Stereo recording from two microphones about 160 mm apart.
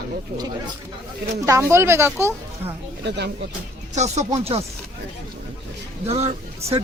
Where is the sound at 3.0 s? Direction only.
90° right.